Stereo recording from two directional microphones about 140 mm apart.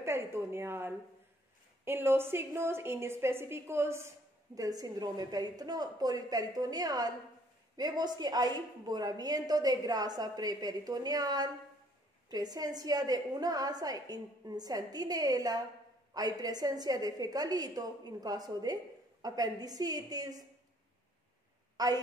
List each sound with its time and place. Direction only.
0.0 s a woman's voice: 20° right (ahead or behind)
21.7 s a woman's voice: 25° right (ahead or behind)